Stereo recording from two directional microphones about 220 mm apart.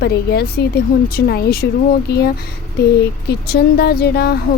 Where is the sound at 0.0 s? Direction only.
45° left (ahead or behind).